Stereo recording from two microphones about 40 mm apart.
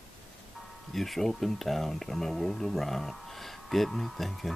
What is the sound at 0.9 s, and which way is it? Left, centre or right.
Speech, centre.